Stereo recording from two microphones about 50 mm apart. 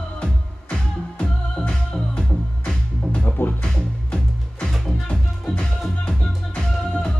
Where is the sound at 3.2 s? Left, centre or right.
Left.